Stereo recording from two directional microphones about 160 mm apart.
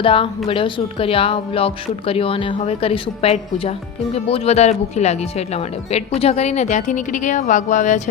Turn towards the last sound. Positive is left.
turn(degrees=50)  # may be behind; listen again after turning